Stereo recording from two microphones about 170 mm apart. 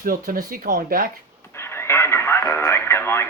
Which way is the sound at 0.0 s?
60° right (ahead or behind).